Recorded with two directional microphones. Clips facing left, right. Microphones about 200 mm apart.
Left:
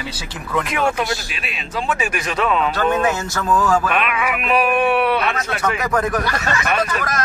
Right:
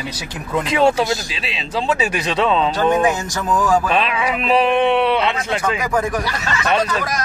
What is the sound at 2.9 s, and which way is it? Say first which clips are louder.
Speech: right 2 dB; 15° right (ahead or behind).